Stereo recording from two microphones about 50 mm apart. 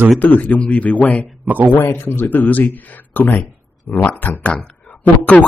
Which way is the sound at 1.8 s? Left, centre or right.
Left.